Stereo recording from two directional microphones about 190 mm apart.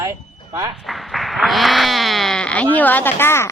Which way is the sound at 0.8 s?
Centre (ahead or behind).